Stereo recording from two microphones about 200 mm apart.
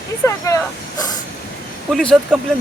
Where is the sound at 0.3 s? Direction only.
15° left (ahead or behind).